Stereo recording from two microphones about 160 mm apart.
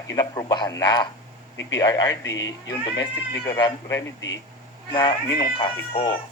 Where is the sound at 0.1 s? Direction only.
20° left (ahead or behind).